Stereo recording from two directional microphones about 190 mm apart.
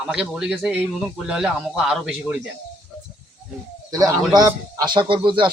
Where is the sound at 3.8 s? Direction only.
20° right (ahead or behind).